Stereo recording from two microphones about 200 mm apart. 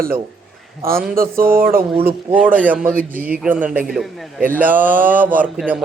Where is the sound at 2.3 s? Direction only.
10° right (ahead or behind).